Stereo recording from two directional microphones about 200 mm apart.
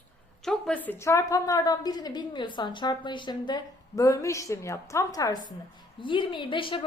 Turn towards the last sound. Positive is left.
turn(degrees=25)  # may be behind; listen again after turning